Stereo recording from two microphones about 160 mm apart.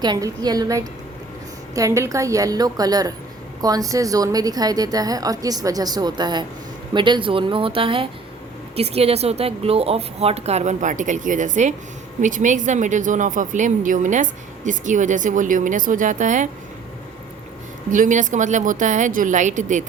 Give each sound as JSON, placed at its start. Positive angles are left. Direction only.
{"t": 0.0, "sound": "a woman's voice", "side_deg": -25}
{"t": 17.9, "sound": "a woman's voice", "side_deg": -55}